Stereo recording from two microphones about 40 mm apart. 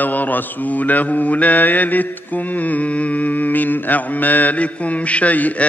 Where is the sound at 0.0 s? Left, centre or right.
Left.